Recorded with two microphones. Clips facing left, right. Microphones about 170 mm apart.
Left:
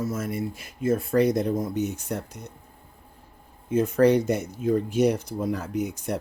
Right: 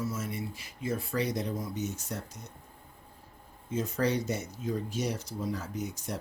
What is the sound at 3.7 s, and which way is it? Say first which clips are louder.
Speech: left 10 dB; 60° left (ahead or behind).